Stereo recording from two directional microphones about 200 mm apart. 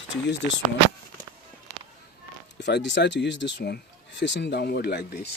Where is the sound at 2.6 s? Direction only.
60° left (ahead or behind).